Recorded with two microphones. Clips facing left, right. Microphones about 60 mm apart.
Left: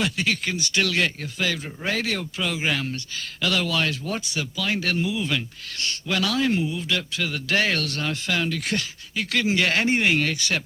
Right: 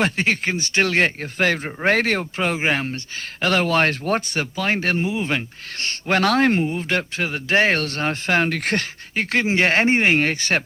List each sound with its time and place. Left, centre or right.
0.0 s speech: right